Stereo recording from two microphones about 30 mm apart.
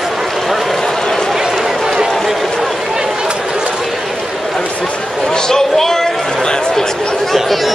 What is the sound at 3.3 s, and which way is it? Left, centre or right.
Chatter, right.